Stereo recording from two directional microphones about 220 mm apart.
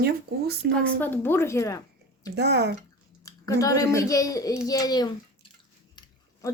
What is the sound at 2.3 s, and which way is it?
Speech, 50° right (ahead or behind).